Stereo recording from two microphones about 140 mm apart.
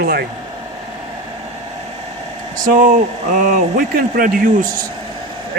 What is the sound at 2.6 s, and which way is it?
Speech, 70° right (ahead or behind).